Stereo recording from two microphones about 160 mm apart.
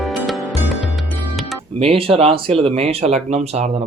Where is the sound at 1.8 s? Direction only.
35° right (ahead or behind).